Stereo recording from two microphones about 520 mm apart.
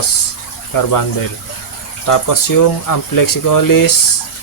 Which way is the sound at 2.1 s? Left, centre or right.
Left.